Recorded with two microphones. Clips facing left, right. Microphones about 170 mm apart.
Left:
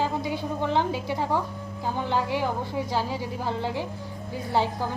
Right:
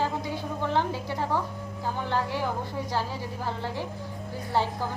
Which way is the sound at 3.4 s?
15° left (ahead or behind).